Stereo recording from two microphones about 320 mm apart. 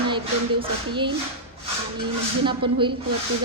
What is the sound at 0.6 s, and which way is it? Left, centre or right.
Speech, centre.